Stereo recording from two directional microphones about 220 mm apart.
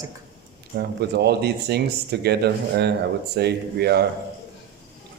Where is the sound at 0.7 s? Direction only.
50° right (ahead or behind).